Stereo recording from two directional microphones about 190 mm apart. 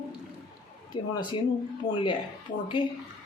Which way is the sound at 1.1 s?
25° left (ahead or behind).